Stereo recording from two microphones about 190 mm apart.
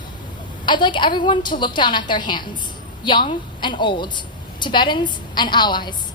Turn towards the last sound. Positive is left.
turn(degrees=25)  # may be behind; listen again after turning